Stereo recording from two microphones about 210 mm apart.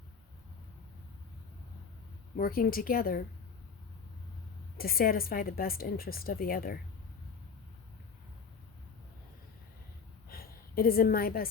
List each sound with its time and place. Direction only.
2.4 s speech: 45° left (ahead or behind)
4.8 s speech: 45° left (ahead or behind)
10.2 s a sound: 45° left (ahead or behind)